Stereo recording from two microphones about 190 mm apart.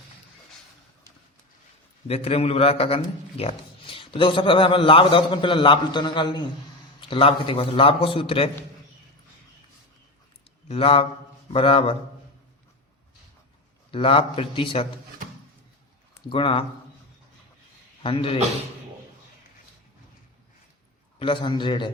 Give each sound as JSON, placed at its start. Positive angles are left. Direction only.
{"t": 2.0, "sound": "a man's voice", "side_deg": 30}
{"t": 10.7, "sound": "a man's voice", "side_deg": 30}
{"t": 13.9, "sound": "a man's voice", "side_deg": 30}
{"t": 16.3, "sound": "a man's voice", "side_deg": 30}
{"t": 18.0, "sound": "a man's voice", "side_deg": 30}
{"t": 21.2, "sound": "a man's voice", "side_deg": 25}